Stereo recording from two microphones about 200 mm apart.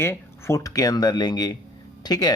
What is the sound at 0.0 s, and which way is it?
Speech, 10° left (ahead or behind).